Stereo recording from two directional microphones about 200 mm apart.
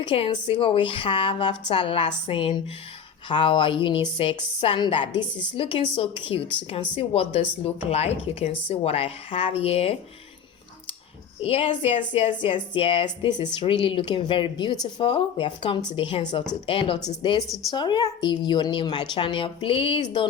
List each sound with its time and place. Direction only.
0.0 s speech: 25° left (ahead or behind)
11.4 s speech: 25° left (ahead or behind)